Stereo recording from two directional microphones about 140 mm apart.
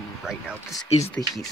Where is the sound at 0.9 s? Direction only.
50° left (ahead or behind).